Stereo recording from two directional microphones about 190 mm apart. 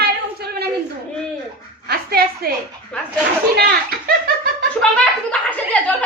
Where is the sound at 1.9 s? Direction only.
55° right (ahead or behind).